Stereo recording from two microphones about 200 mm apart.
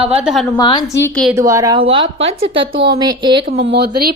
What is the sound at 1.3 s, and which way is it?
Speech, 15° right (ahead or behind).